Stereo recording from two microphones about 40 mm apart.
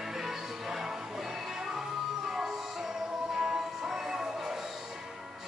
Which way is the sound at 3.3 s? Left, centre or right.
Centre.